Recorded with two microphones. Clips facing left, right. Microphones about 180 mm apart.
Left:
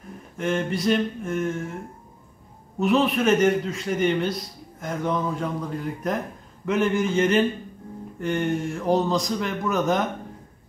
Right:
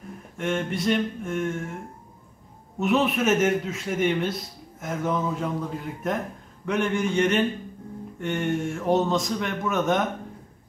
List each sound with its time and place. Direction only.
0.4 s a man's voice: centre (ahead or behind)
2.8 s a man's voice: 5° right (ahead or behind)